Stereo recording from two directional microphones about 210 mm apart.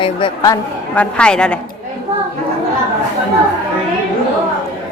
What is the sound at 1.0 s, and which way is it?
Speech, 5° left (ahead or behind).